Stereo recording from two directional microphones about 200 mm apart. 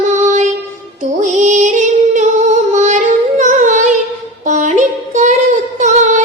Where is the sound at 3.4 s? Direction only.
40° right (ahead or behind).